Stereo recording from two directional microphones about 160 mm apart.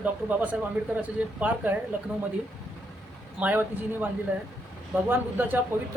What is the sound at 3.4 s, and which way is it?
Speech, 10° right (ahead or behind).